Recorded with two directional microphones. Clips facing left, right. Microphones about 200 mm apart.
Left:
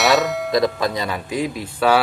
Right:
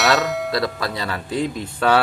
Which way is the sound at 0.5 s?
20° left (ahead or behind).